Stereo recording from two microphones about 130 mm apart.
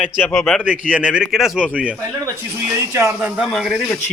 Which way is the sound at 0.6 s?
10° right (ahead or behind).